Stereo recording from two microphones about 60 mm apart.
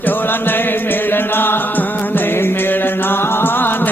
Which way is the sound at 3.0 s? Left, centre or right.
Left.